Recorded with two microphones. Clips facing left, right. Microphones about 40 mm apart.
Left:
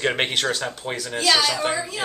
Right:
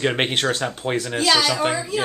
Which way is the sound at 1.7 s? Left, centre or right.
Centre.